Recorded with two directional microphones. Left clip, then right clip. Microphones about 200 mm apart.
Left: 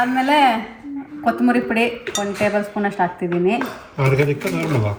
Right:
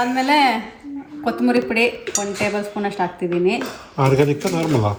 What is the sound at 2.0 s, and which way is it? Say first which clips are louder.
Speech: left 2 dB; centre (ahead or behind).